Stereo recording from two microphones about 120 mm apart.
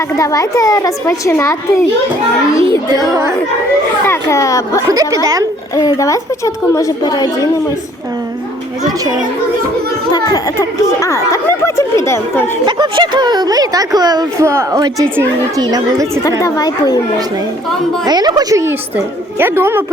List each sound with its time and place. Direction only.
0.2 s speech: 30° left (ahead or behind)
4.0 s speech: 25° left (ahead or behind)
4.9 s speech: 30° right (ahead or behind)
5.7 s speech: 30° left (ahead or behind)
10.1 s speech: 30° left (ahead or behind)
12.6 s speech: 40° right (ahead or behind)
16.4 s speech: 35° left (ahead or behind)
18.0 s a woman's voice: 35° right (ahead or behind); by 19.8 s 20° right (ahead or behind)